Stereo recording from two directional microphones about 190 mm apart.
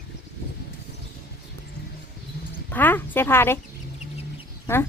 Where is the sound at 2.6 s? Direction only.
10° left (ahead or behind).